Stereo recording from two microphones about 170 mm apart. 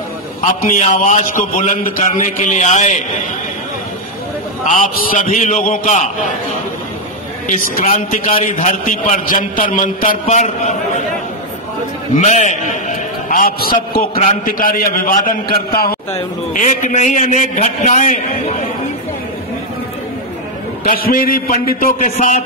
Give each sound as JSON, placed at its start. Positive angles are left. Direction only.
{"t": 0.6, "sound": "a man's voice", "side_deg": 50}
{"t": 4.6, "sound": "a man's voice", "side_deg": 50}
{"t": 7.4, "sound": "a man's voice", "side_deg": 55}
{"t": 7.9, "sound": "a man's voice", "side_deg": 45}
{"t": 12.2, "sound": "a man's voice", "side_deg": 45}
{"t": 16.1, "sound": "a man's voice", "side_deg": 45}
{"t": 21.1, "sound": "a man's voice", "side_deg": 60}